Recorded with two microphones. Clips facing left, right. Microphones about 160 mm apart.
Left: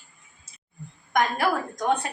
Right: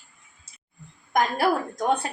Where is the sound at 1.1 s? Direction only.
30° right (ahead or behind).